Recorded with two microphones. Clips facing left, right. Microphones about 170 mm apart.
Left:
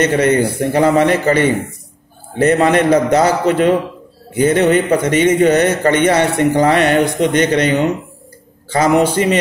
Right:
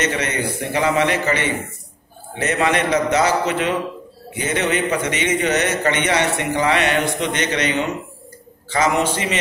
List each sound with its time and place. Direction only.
0.1 s a man's voice: 45° left (ahead or behind)